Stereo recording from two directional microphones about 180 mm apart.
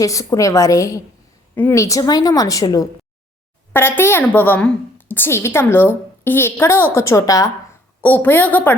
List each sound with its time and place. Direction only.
0.0 s a woman's voice: 20° left (ahead or behind)